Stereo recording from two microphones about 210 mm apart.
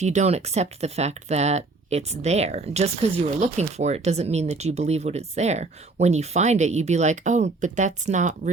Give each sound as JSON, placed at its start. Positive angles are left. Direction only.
{"t": 0.0, "sound": "speech", "side_deg": -35}